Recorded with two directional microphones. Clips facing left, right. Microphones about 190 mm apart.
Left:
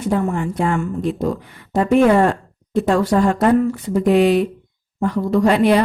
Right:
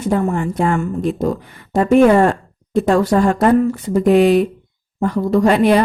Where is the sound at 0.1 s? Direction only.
40° right (ahead or behind).